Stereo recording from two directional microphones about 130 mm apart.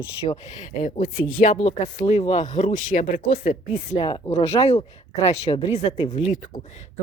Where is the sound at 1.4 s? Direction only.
50° left (ahead or behind).